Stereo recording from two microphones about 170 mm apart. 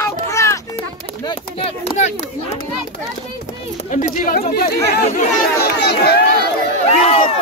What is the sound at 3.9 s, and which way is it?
Chatter, 50° left (ahead or behind).